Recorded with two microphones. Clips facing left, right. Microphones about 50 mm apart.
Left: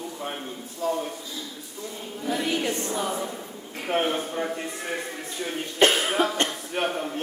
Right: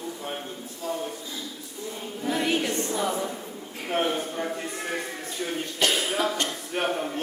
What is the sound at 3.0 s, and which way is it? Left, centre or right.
Choir, centre.